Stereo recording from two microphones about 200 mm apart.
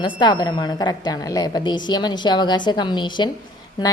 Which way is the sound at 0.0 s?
20° left (ahead or behind).